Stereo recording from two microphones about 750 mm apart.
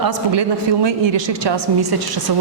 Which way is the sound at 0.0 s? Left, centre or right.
Right.